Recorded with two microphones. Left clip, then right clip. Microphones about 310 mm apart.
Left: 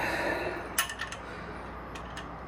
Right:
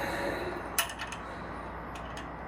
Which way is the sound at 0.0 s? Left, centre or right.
Centre.